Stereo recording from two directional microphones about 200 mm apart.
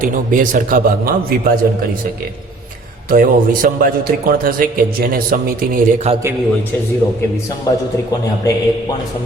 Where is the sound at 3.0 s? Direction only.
45° right (ahead or behind).